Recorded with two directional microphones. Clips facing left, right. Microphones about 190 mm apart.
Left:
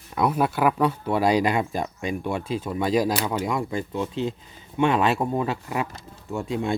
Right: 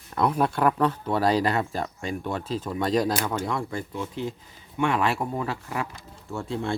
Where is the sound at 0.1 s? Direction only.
5° left (ahead or behind).